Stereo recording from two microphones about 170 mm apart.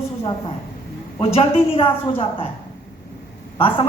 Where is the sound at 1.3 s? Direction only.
35° left (ahead or behind).